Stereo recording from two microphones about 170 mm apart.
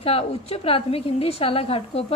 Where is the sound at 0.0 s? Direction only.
35° left (ahead or behind).